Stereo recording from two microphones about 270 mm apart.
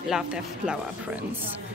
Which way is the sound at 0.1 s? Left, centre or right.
Centre.